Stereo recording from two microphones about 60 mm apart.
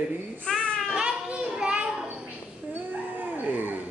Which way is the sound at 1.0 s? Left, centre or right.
Centre.